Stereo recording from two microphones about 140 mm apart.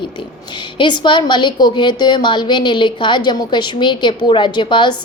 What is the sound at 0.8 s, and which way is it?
A woman's voice, 35° left (ahead or behind).